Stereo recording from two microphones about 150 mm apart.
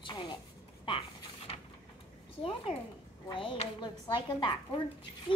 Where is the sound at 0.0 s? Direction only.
30° left (ahead or behind).